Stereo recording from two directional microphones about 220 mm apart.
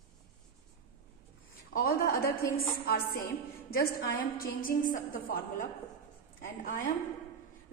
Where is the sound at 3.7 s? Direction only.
45° left (ahead or behind).